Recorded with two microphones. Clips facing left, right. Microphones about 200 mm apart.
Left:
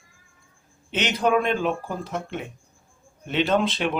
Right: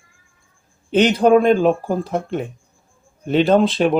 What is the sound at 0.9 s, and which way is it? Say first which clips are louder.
Speech: right 9 dB; 35° right (ahead or behind).